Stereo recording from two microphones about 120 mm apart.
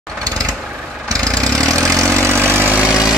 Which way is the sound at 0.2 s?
30° right (ahead or behind).